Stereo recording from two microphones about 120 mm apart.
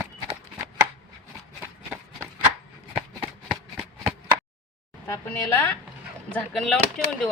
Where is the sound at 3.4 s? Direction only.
5° right (ahead or behind).